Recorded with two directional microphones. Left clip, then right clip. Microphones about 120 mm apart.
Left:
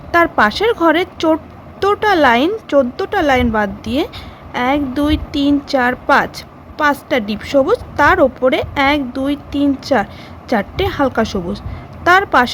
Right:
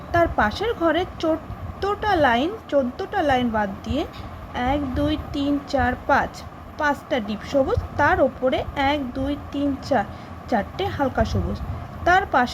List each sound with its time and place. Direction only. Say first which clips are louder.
0.1 s speech: left 8 dB; 55° left (ahead or behind)